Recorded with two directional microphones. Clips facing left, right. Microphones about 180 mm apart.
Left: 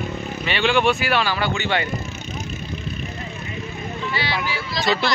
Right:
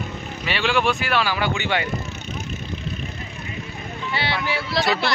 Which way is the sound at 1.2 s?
15° right (ahead or behind).